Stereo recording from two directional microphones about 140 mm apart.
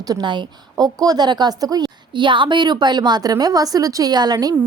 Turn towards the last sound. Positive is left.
turn(degrees=-30)  # may be behind; listen again after turning